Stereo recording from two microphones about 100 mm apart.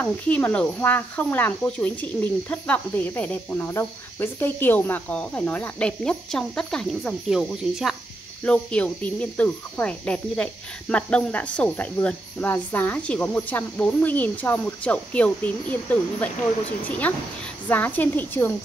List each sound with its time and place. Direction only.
0.0 s speech: 20° left (ahead or behind); by 7.9 s centre (ahead or behind)
8.5 s a woman's voice: 10° left (ahead or behind)